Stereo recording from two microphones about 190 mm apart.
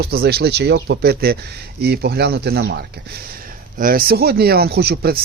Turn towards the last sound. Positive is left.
turn(degrees=-55)  # may be behind; listen again after turning